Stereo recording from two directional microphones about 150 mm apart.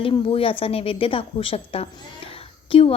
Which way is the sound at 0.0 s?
35° left (ahead or behind).